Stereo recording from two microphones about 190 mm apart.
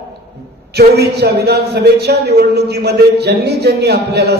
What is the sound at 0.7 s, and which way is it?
A man's voice, 60° right (ahead or behind).